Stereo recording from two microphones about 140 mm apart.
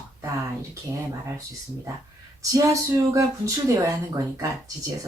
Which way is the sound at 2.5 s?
20° right (ahead or behind).